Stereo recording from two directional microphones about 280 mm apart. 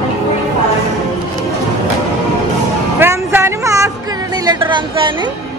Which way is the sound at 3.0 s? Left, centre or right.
Centre.